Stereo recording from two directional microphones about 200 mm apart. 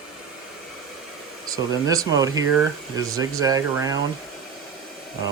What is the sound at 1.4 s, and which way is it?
Speech, 20° right (ahead or behind).